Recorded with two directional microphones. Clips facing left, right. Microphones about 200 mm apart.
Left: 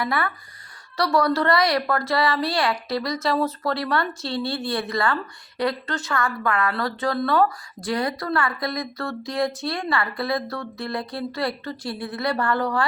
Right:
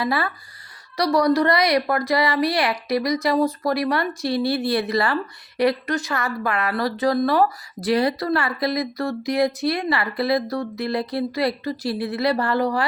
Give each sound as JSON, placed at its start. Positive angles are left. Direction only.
{"t": 0.0, "sound": "a woman's voice", "side_deg": -25}